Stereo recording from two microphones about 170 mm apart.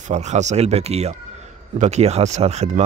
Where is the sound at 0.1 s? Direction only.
40° right (ahead or behind).